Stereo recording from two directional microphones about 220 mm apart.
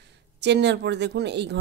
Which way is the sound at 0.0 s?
50° right (ahead or behind).